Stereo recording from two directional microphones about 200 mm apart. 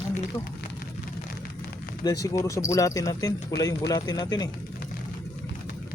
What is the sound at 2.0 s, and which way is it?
Speech, 15° left (ahead or behind).